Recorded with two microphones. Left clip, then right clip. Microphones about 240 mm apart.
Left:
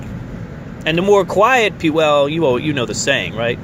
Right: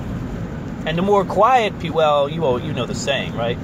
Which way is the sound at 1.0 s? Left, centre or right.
Left.